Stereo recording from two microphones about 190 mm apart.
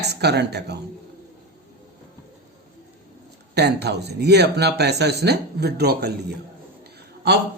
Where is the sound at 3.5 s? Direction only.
60° right (ahead or behind).